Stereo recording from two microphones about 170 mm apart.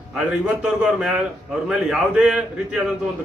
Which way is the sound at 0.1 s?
5° right (ahead or behind).